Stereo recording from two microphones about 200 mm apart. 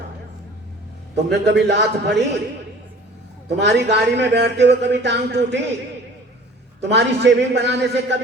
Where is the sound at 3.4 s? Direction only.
60° right (ahead or behind).